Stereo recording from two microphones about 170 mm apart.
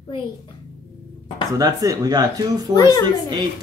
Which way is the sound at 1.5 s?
20° right (ahead or behind).